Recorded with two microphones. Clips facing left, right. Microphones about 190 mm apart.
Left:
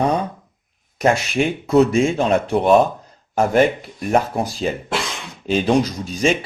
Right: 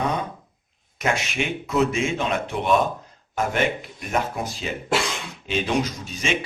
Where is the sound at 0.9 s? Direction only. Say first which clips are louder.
Left 7 dB; 35° left (ahead or behind).